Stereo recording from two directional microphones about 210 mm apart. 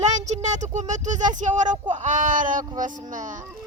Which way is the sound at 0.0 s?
35° right (ahead or behind).